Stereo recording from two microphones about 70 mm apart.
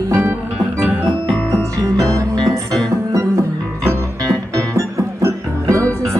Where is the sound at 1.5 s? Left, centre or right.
Right.